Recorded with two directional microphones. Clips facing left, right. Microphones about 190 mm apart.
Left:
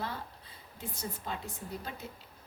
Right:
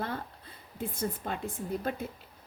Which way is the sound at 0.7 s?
55° right (ahead or behind).